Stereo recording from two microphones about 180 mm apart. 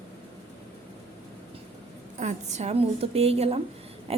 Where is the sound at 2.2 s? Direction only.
40° right (ahead or behind).